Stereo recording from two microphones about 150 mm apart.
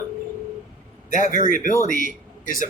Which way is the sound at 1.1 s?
60° left (ahead or behind).